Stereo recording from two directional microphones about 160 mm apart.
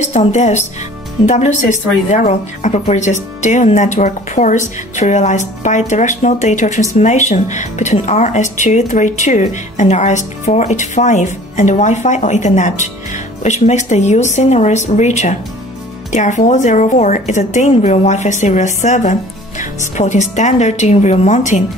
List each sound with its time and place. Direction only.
0.0 s speech: 45° left (ahead or behind)